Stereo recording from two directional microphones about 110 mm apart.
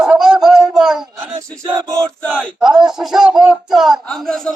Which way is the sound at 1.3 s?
35° right (ahead or behind).